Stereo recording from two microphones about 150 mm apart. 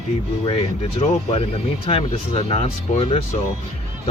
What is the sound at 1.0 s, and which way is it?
Speech, 40° left (ahead or behind).